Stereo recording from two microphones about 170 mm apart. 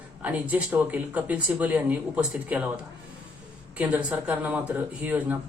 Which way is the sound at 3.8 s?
10° right (ahead or behind).